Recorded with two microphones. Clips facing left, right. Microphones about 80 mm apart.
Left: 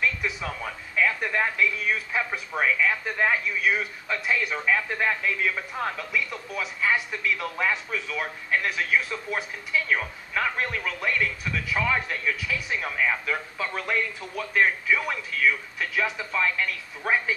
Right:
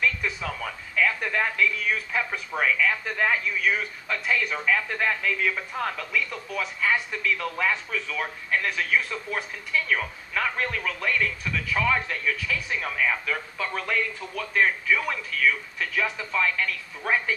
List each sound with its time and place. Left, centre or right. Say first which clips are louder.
0.9 s speech: even; centre